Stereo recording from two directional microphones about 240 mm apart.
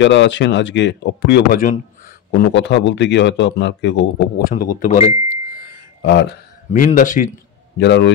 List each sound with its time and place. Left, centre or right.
0.0 s a man's voice: left
2.5 s a man's voice: left
5.3 s a sound: left
6.7 s speech: left
7.7 s a man's voice: left